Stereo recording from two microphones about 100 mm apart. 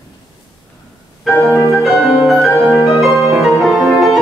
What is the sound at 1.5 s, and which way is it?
Music, 30° left (ahead or behind).